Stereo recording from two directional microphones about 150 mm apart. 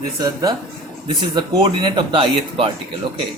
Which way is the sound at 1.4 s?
30° right (ahead or behind).